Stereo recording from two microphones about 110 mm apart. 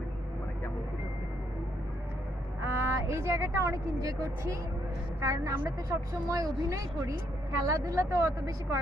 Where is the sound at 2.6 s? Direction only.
25° right (ahead or behind).